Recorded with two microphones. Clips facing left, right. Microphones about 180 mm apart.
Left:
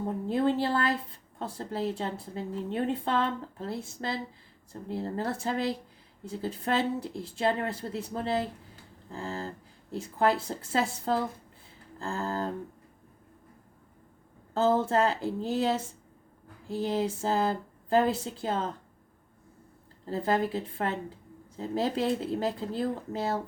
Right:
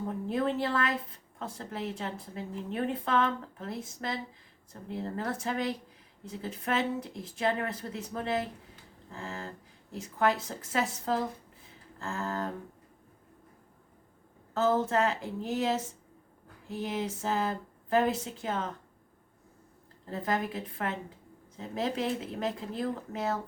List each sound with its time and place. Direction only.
0.3 s a woman's voice: 30° left (ahead or behind)
14.5 s a woman's voice: 30° left (ahead or behind)
20.1 s a woman's voice: 30° left (ahead or behind)